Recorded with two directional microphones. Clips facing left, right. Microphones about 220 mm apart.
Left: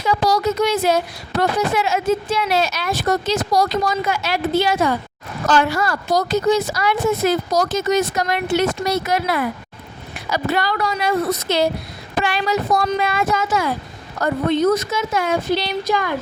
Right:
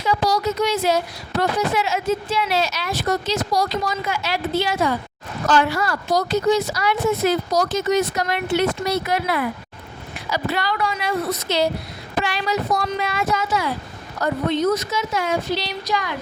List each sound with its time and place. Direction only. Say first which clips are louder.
0.0 s speech: left 2 dB; 50° left (ahead or behind)